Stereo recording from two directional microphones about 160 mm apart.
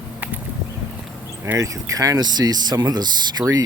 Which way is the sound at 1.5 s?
20° right (ahead or behind).